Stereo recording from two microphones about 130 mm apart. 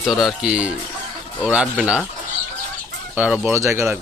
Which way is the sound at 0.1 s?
Centre (ahead or behind).